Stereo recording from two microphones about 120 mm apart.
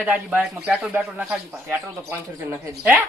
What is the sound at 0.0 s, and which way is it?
Speech, 10° right (ahead or behind).